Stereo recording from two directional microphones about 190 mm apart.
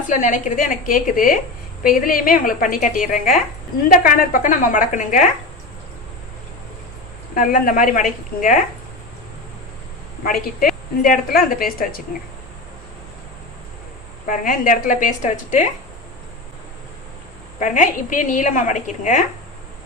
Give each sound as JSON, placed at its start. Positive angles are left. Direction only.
{"t": 0.1, "sound": "a woman's voice", "side_deg": 40}
{"t": 7.3, "sound": "a woman's voice", "side_deg": 45}
{"t": 10.2, "sound": "a woman's voice", "side_deg": 50}
{"t": 14.3, "sound": "a woman's voice", "side_deg": 45}
{"t": 17.6, "sound": "a woman's voice", "side_deg": 40}